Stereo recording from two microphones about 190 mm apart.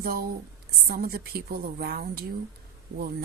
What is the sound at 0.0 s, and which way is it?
A woman's voice, 50° right (ahead or behind).